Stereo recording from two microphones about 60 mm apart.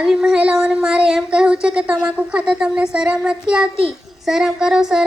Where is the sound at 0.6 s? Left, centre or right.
Centre.